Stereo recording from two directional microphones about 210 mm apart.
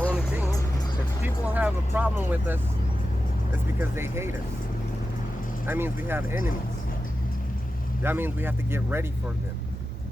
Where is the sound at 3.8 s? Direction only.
10° right (ahead or behind).